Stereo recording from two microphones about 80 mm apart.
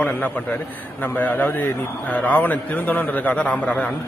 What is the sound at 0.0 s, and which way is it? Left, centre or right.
A man's voice, centre.